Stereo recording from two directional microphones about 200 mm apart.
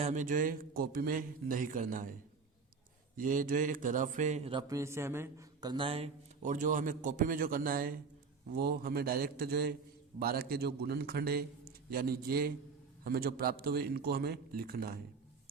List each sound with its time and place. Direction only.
0.0 s a man's voice: 40° right (ahead or behind)
3.2 s a man's voice: 40° right (ahead or behind)
4.7 s a man's voice: 15° right (ahead or behind); by 14.9 s 50° right (ahead or behind)